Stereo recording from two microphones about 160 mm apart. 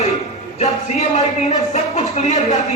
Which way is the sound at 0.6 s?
45° left (ahead or behind).